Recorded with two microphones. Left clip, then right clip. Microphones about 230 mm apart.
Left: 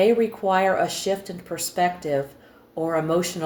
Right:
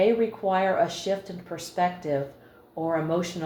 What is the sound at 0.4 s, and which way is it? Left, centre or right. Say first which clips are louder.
Speech: left 3 dB; left.